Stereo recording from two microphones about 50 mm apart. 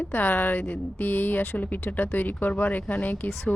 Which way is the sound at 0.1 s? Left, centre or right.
Left.